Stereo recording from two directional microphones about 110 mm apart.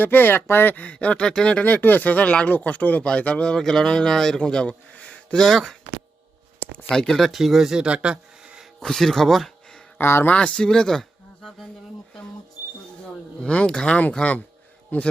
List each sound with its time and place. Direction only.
0.0 s speech: 15° left (ahead or behind); by 5.7 s centre (ahead or behind)
6.8 s speech: 5° left (ahead or behind)
8.8 s speech: 5° left (ahead or behind)
10.0 s speech: 20° left (ahead or behind)
10.3 s speech: 10° left (ahead or behind)
13.4 s speech: 10° left (ahead or behind)